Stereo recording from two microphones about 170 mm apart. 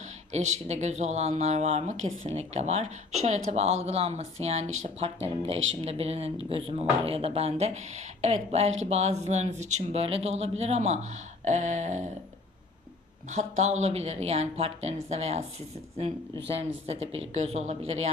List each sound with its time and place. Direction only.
0.3 s speech: 40° right (ahead or behind)
11.4 s a sound: 45° right (ahead or behind)
13.3 s speech: 45° right (ahead or behind)
16.8 s speech: 35° right (ahead or behind)